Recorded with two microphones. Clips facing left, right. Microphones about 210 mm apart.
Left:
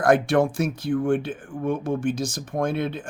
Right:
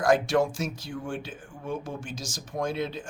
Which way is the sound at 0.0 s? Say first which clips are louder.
Left 4 dB; 55° left (ahead or behind).